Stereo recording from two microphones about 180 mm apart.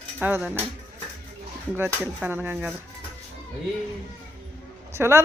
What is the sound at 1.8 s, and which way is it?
Speech, 10° right (ahead or behind).